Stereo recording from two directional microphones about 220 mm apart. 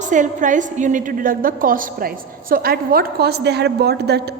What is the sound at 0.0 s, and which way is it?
A woman's voice, 35° right (ahead or behind).